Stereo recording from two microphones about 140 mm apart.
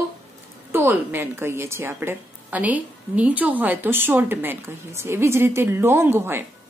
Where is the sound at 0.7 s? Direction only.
15° right (ahead or behind).